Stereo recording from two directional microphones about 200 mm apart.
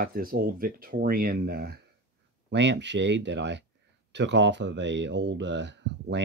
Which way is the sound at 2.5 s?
60° right (ahead or behind).